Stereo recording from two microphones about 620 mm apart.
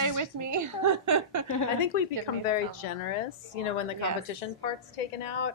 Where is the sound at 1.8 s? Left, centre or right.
Left.